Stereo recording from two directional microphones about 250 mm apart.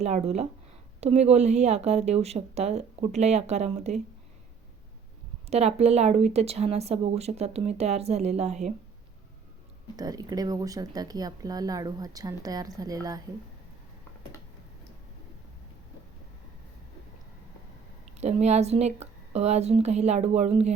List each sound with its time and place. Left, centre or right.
0.0 s a woman's voice: right
5.5 s a woman's voice: right
10.0 s speech: centre
18.2 s a woman's voice: right